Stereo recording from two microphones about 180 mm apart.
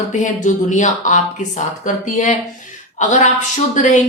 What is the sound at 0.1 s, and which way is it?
Speech, 45° left (ahead or behind).